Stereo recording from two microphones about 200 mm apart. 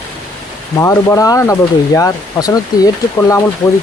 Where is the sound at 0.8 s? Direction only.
15° left (ahead or behind).